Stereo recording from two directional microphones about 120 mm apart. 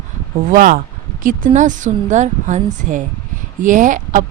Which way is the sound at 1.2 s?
90° right.